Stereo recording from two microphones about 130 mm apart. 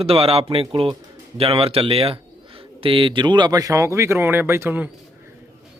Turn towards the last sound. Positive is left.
turn(degrees=-15)  # may be behind; listen again after turning